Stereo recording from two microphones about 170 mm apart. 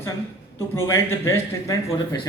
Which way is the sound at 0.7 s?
15° left (ahead or behind).